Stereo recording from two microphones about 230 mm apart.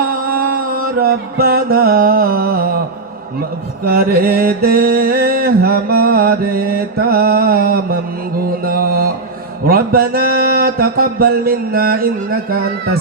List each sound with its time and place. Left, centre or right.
0.1 s music: right
3.8 s mantra: right